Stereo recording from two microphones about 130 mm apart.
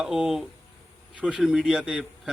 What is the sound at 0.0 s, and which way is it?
A man's voice, 5° right (ahead or behind).